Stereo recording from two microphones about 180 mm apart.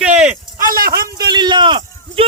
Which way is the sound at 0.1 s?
40° right (ahead or behind).